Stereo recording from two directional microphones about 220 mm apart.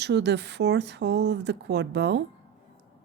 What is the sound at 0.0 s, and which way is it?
Speech, 50° right (ahead or behind).